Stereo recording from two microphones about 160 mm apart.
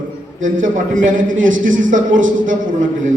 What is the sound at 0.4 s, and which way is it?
A man's voice, 55° right (ahead or behind).